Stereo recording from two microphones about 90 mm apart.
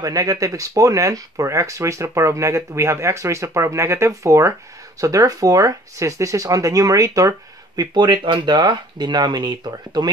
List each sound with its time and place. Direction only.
0.0 s speech: 40° right (ahead or behind)
7.9 s speech: 60° right (ahead or behind)
8.5 s speech: 50° right (ahead or behind)